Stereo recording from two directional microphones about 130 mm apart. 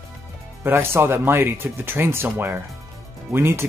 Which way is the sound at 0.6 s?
20° right (ahead or behind).